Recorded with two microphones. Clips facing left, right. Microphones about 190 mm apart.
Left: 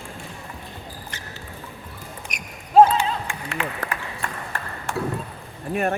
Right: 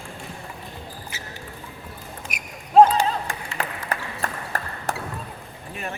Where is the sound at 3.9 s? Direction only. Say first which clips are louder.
Right 2 dB; 40° right (ahead or behind).